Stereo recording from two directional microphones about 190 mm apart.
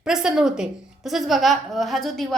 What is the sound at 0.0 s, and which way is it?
A woman's voice, 5° right (ahead or behind).